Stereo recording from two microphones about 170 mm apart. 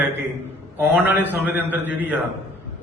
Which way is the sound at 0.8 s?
10° right (ahead or behind).